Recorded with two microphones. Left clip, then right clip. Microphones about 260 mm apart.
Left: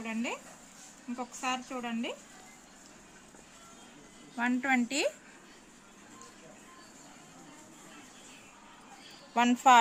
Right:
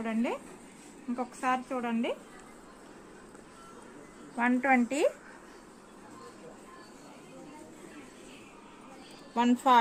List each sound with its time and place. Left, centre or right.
0.0 s speech: centre
4.4 s a woman's voice: left
9.3 s speech: left